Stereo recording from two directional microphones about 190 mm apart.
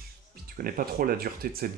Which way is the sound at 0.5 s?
50° right (ahead or behind).